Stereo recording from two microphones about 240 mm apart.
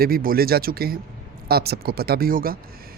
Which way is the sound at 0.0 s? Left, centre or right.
Right.